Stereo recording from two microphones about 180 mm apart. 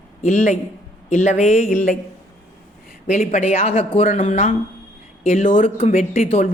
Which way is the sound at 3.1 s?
40° left (ahead or behind).